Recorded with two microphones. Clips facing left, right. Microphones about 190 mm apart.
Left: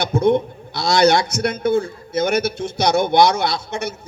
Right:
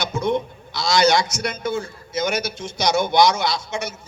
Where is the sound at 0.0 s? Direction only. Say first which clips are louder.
Left 6 dB; 55° left (ahead or behind).